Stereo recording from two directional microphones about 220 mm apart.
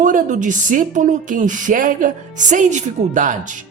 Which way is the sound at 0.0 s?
35° right (ahead or behind).